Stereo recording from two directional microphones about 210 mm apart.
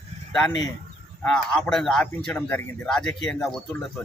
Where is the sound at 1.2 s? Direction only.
5° left (ahead or behind).